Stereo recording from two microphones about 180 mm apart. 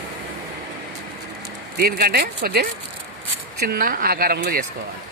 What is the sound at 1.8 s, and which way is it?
Speech, 60° right (ahead or behind).